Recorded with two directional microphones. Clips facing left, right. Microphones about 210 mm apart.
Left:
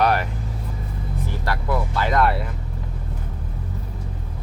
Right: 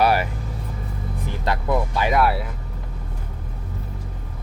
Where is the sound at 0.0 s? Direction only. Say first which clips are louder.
Right 1 dB; 5° right (ahead or behind).